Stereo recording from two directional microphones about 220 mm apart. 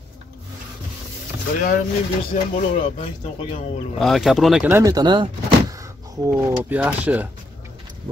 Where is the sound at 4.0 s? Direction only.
Centre (ahead or behind); by 5.3 s 20° right (ahead or behind).